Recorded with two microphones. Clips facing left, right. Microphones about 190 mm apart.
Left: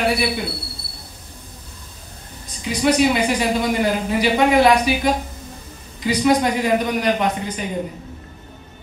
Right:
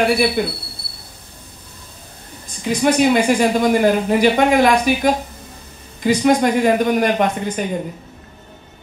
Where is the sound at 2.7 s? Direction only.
45° right (ahead or behind).